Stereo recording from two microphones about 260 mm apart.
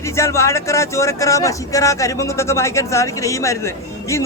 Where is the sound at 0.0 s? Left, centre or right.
Centre.